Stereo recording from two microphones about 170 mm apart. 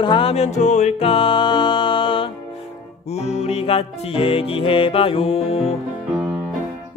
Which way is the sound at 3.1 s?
40° left (ahead or behind).